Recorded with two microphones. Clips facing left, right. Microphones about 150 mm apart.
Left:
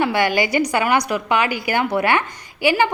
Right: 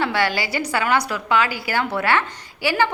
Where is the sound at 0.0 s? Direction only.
15° left (ahead or behind).